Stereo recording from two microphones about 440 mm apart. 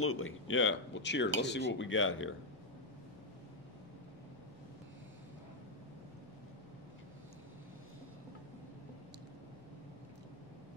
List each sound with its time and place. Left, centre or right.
0.0 s speech: left